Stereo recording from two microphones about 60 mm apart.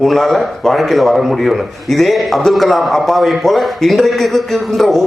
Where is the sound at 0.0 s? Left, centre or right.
Centre.